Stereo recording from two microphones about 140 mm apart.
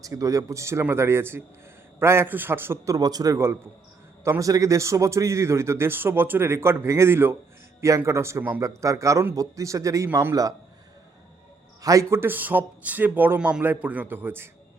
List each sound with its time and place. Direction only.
0.0 s a man's voice: 25° right (ahead or behind)
11.8 s speech: 25° right (ahead or behind)